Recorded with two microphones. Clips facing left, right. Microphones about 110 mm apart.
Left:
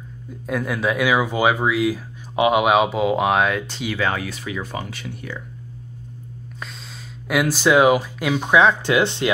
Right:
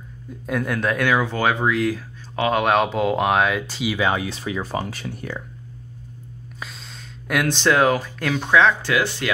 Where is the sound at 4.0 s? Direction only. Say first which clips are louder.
Right 1 dB; 20° right (ahead or behind); by 5.4 s 40° right (ahead or behind).